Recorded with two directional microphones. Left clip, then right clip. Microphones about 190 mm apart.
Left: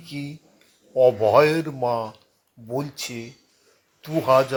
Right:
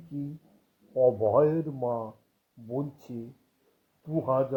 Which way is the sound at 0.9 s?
45° left (ahead or behind).